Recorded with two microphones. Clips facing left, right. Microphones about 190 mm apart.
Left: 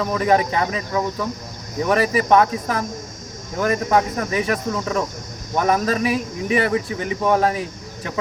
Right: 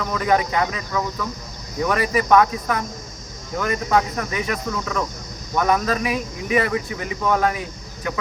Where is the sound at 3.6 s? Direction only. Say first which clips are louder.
Left 5 dB; 45° left (ahead or behind).